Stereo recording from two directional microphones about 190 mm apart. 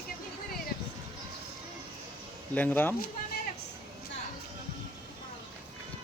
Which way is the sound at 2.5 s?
10° left (ahead or behind).